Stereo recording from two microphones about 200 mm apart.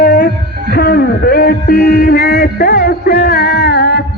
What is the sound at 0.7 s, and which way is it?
Music, 50° left (ahead or behind).